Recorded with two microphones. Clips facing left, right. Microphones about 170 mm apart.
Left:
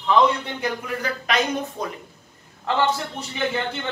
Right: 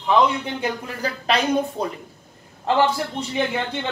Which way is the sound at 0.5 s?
30° right (ahead or behind).